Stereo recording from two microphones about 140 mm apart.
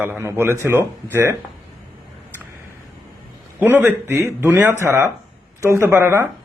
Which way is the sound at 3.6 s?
10° right (ahead or behind).